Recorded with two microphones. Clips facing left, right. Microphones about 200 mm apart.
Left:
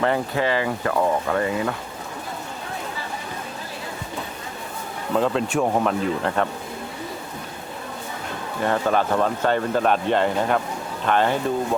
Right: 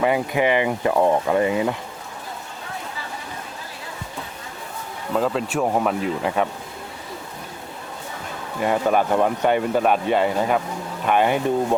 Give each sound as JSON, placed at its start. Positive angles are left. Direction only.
{"t": 0.0, "sound": "speech", "side_deg": -15}
{"t": 5.1, "sound": "speech", "side_deg": 0}
{"t": 8.6, "sound": "speech", "side_deg": -10}